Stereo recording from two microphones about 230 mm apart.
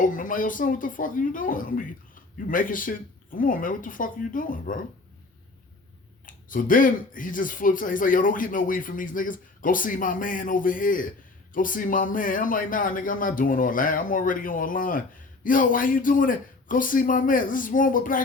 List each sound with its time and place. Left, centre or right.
0.0 s speech: left
6.2 s speech: left